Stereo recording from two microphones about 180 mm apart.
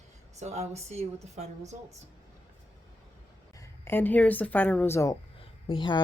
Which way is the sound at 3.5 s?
15° left (ahead or behind).